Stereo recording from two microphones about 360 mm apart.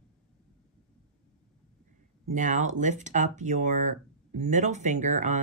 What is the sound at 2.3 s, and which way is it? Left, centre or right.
Speech, right.